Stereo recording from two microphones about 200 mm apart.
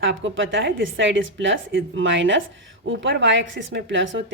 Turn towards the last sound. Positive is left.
turn(degrees=-70)  # may be behind; listen again after turning